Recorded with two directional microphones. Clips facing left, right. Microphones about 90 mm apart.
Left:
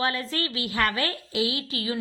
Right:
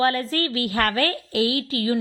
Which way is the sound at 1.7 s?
40° right (ahead or behind).